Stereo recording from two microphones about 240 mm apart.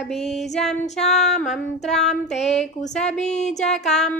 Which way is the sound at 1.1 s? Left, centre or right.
Centre.